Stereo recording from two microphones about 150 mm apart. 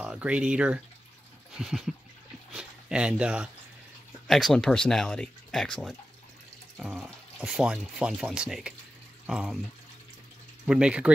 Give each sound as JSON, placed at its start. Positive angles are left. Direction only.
{"t": 0.0, "sound": "speech", "side_deg": -10}
{"t": 10.7, "sound": "speech", "side_deg": -5}